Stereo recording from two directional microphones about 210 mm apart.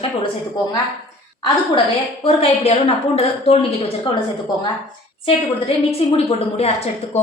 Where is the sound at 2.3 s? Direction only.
30° left (ahead or behind).